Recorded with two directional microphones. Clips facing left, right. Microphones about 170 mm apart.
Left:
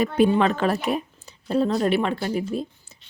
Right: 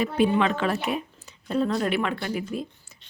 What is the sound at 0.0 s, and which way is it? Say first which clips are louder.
A woman's voice: left 3 dB; 40° left (ahead or behind).